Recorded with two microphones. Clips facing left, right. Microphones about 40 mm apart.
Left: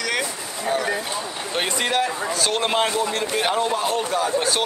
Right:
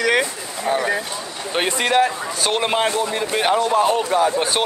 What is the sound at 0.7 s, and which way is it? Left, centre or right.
Speech, centre.